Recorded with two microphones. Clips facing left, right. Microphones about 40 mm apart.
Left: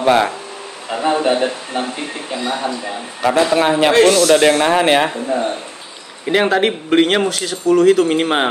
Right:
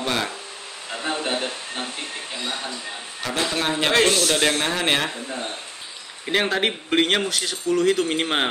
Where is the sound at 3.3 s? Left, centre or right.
Centre.